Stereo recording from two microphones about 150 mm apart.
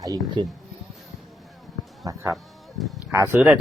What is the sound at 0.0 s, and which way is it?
Speech, 25° right (ahead or behind).